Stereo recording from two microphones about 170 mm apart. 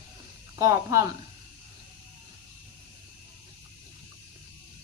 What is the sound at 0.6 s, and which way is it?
Speech, 20° right (ahead or behind).